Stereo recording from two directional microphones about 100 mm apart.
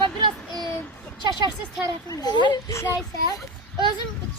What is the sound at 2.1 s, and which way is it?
Speech, 45° left (ahead or behind).